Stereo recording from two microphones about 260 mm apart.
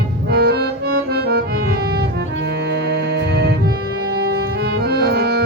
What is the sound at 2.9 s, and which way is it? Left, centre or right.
Music, right.